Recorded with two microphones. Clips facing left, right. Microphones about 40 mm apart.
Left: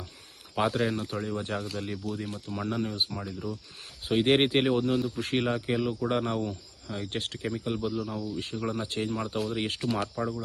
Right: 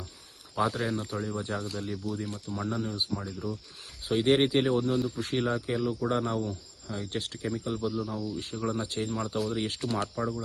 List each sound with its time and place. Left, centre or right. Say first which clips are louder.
0.7 s speech: left 3 dB; centre
0.9 s speech: left 1 dB; left
9.9 s speech: even; centre